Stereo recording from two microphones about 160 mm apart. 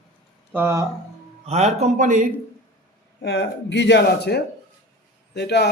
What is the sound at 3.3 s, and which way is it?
A man's voice, 90° left.